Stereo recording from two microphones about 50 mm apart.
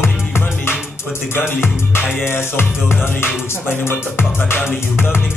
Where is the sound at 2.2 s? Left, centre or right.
Left.